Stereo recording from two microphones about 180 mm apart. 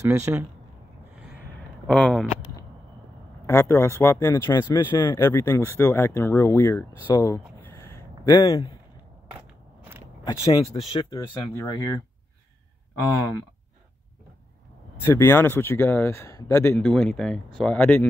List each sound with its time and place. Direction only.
0.0 s speech: 15° right (ahead or behind)
1.9 s speech: 5° left (ahead or behind)
3.4 s speech: 15° left (ahead or behind)
7.2 s a sound: 15° left (ahead or behind)
10.2 s speech: 20° left (ahead or behind)
10.6 s speech: 35° left (ahead or behind); by 11.7 s 20° left (ahead or behind)
15.0 s speech: 15° left (ahead or behind)
16.8 s speech: 5° left (ahead or behind)